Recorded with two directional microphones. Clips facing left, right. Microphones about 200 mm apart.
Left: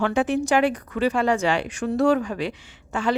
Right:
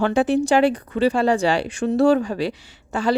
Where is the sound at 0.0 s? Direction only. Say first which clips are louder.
Right 3 dB; 35° right (ahead or behind).